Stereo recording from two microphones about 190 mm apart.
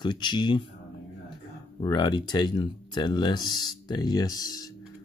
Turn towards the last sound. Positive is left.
turn(degrees=20)  # may be behind; listen again after turning